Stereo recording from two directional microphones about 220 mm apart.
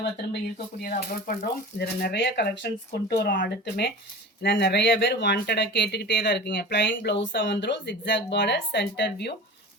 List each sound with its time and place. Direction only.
0.0 s speech: 45° left (ahead or behind)